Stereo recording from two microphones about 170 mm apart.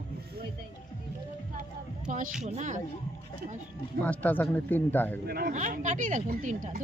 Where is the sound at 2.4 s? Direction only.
45° right (ahead or behind).